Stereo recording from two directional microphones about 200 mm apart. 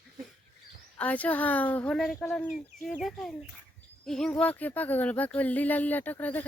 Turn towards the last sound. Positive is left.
turn(degrees=10)  # may be behind; listen again after turning